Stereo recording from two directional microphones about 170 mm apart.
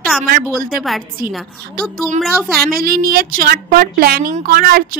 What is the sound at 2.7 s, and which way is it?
A woman's voice, 60° right (ahead or behind).